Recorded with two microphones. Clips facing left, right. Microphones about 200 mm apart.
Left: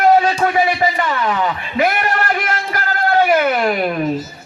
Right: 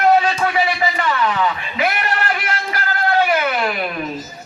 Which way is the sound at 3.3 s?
45° left (ahead or behind).